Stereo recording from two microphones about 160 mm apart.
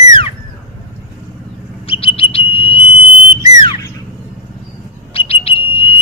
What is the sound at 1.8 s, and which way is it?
Bird, 35° left (ahead or behind).